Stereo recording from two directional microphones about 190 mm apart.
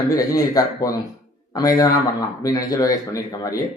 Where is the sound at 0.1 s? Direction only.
20° left (ahead or behind).